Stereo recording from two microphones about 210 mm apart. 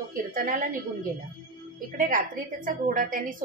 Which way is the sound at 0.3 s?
40° right (ahead or behind).